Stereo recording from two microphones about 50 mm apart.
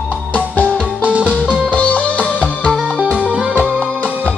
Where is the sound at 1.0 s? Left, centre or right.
Right.